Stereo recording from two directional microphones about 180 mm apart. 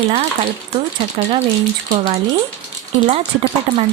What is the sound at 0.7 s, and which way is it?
Speech, 30° right (ahead or behind).